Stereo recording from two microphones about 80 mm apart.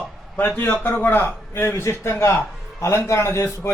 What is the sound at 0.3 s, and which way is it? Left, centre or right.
A man's voice, left.